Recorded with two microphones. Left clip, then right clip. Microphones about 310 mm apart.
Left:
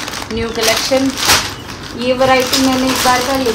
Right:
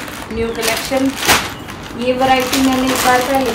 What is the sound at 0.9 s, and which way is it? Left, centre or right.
Speech, left.